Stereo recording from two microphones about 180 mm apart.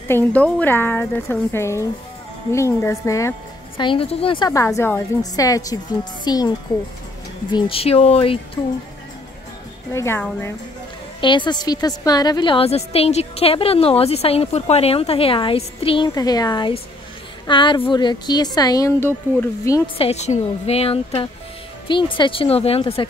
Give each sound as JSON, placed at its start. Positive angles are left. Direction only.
{"t": 0.1, "sound": "speech", "side_deg": 10}
{"t": 3.7, "sound": "a woman's voice", "side_deg": 30}
{"t": 7.5, "sound": "a woman's voice", "side_deg": 30}
{"t": 9.9, "sound": "speech", "side_deg": 15}
{"t": 11.1, "sound": "a woman's voice", "side_deg": 25}
{"t": 20.0, "sound": "a woman's voice", "side_deg": 35}